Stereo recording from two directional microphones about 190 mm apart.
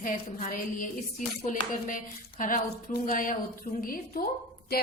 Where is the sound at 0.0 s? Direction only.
45° left (ahead or behind).